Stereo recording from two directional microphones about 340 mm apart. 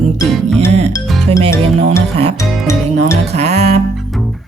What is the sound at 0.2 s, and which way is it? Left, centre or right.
Music, centre.